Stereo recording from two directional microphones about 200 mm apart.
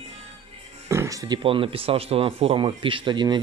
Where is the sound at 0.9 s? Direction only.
15° right (ahead or behind).